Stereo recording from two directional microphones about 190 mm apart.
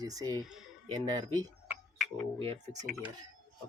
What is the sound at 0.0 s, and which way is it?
Speech, 20° right (ahead or behind).